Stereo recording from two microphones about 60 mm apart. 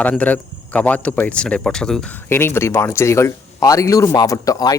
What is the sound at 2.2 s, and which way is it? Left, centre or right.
Speech, left.